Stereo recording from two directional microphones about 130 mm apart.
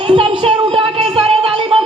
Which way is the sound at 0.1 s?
45° right (ahead or behind).